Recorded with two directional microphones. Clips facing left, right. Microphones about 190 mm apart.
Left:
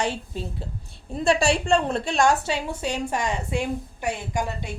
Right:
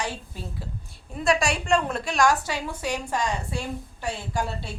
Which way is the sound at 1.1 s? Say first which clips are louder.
Left 3 dB; 30° left (ahead or behind).